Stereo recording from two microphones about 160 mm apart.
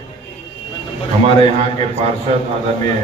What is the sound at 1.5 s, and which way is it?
Speech, 40° right (ahead or behind).